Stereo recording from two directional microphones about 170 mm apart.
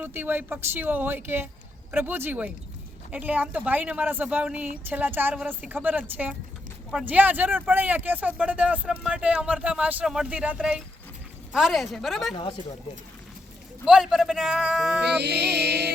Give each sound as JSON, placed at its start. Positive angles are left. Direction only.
{"t": 0.0, "sound": "a man's voice", "side_deg": -10}
{"t": 13.8, "sound": "a man's voice", "side_deg": 0}
{"t": 15.2, "sound": "music", "side_deg": -75}